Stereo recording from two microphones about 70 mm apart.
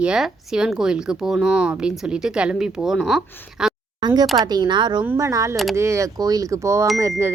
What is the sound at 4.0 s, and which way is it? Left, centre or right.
Speech, right.